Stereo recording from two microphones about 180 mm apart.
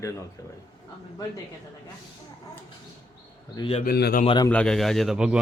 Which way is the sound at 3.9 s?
60° left (ahead or behind).